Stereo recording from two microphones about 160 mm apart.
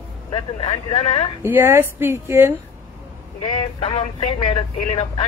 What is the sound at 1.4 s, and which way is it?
A woman's voice, 15° right (ahead or behind).